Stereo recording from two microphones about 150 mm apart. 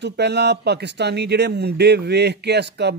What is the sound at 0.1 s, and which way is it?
A man's voice, 90° right.